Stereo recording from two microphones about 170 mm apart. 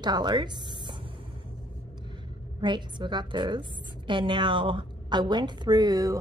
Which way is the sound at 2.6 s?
25° right (ahead or behind).